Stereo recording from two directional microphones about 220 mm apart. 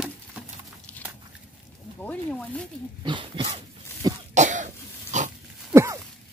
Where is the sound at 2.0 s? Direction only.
5° left (ahead or behind).